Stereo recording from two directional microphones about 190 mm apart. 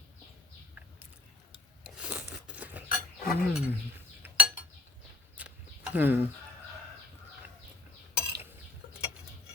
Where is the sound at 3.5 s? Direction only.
10° right (ahead or behind).